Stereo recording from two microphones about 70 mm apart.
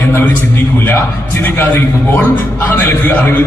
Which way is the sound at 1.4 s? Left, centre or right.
Left.